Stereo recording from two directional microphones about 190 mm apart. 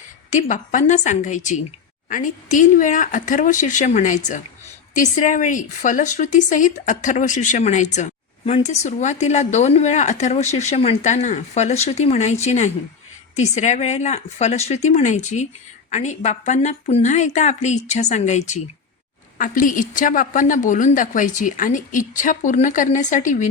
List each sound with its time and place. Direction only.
0.3 s a woman's voice: 40° left (ahead or behind)